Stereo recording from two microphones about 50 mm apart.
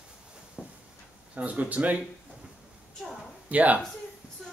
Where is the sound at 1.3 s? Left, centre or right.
Right.